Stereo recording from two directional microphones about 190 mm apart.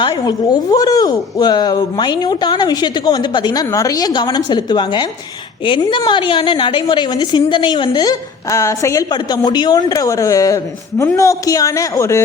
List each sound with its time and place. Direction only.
0.0 s a woman's voice: 20° left (ahead or behind)